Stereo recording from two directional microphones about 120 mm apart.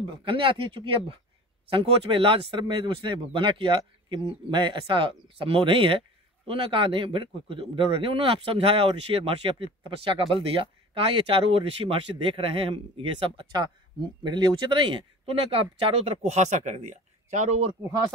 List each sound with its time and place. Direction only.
0.0 s speech: 45° right (ahead or behind); by 17.7 s 65° right (ahead or behind)
17.8 s speech: 30° right (ahead or behind)